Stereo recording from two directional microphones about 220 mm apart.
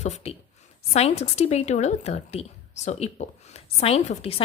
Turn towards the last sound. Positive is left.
turn(degrees=25)  # may be behind; listen again after turning